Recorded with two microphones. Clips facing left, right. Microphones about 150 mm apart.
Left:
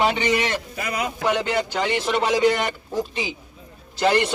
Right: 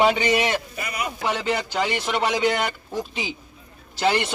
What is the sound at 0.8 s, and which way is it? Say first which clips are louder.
Speech: left 3 dB; 90° left.